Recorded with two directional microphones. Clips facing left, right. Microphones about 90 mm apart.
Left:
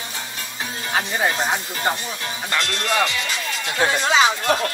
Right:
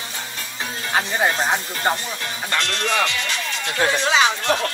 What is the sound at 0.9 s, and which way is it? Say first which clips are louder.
Speech: right 1 dB; 35° right (ahead or behind).